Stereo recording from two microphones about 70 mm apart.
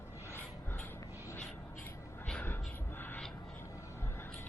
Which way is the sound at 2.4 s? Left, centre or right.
Left.